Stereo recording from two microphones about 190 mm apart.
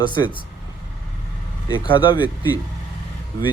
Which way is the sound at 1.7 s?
25° left (ahead or behind).